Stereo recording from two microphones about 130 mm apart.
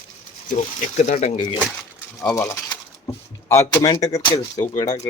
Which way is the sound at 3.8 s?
30° left (ahead or behind).